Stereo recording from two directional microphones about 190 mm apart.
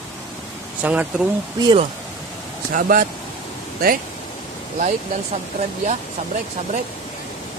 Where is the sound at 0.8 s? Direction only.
5° right (ahead or behind).